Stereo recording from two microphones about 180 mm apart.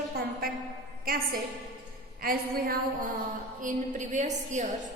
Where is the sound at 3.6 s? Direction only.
40° right (ahead or behind).